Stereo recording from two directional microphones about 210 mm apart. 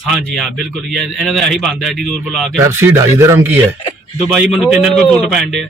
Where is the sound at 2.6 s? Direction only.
10° right (ahead or behind).